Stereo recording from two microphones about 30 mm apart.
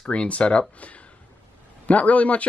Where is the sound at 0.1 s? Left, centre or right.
Left.